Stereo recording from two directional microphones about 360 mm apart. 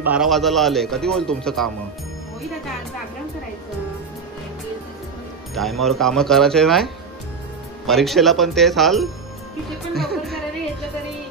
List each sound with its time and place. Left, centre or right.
0.0 s speech: centre
5.5 s speech: centre
9.9 s music: centre